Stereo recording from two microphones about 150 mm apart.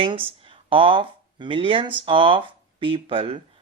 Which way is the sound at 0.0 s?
35° right (ahead or behind).